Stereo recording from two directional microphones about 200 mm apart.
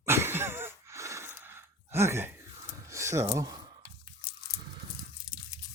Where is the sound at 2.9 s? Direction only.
15° right (ahead or behind).